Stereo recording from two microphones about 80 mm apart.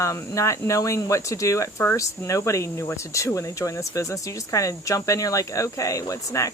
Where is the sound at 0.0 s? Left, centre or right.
Left.